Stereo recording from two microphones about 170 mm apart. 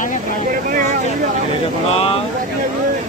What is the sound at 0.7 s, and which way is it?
Speech, 50° right (ahead or behind).